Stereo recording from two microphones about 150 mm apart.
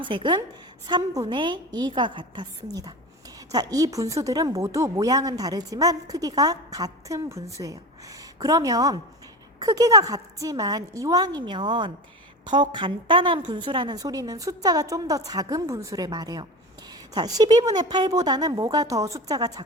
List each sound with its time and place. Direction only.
0.0 s a woman's voice: 35° right (ahead or behind)